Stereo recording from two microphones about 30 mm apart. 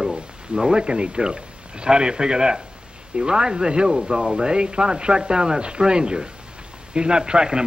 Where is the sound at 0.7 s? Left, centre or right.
Right.